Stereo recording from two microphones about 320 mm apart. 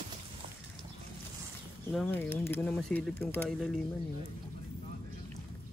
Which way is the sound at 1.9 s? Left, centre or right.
Centre.